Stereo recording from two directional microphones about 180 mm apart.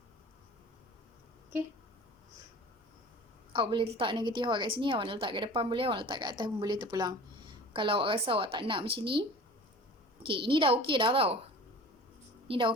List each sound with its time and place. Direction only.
3.5 s a woman's voice: 30° right (ahead or behind)
10.2 s a woman's voice: 30° right (ahead or behind)
12.5 s a woman's voice: 30° right (ahead or behind)